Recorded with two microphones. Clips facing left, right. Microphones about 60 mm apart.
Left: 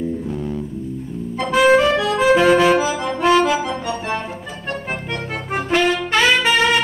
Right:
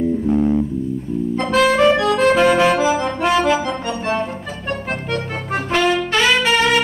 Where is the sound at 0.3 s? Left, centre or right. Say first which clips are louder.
Right 9 dB; right.